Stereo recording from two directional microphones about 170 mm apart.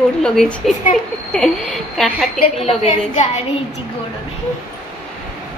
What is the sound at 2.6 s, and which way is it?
Speech, 40° left (ahead or behind).